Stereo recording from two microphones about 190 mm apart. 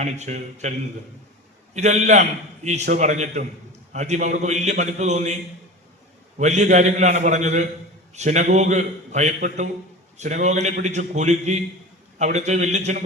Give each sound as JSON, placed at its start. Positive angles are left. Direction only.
{"t": 0.0, "sound": "a man's voice", "side_deg": -40}
{"t": 1.7, "sound": "a man's voice", "side_deg": -40}
{"t": 6.4, "sound": "a man's voice", "side_deg": -40}